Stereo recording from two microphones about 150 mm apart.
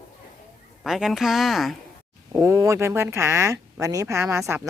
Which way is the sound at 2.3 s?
20° right (ahead or behind).